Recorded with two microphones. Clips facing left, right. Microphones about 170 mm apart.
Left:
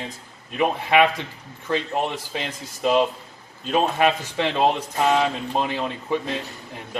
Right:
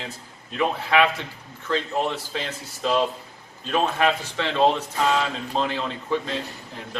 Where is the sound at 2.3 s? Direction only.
15° left (ahead or behind).